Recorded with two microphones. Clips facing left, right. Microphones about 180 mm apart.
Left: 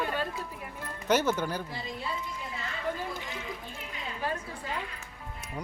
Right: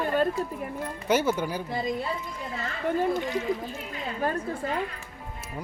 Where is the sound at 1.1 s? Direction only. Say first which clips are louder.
Right 2 dB; 10° right (ahead or behind).